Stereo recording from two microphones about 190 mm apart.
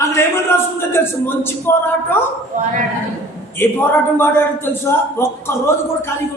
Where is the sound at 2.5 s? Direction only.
40° right (ahead or behind).